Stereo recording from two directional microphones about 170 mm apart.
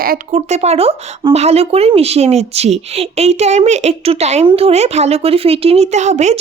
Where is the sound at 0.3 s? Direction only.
40° right (ahead or behind).